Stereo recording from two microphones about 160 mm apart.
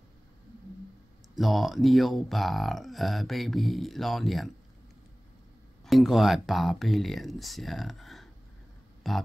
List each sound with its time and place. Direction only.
1.3 s speech: centre (ahead or behind)
5.9 s speech: centre (ahead or behind)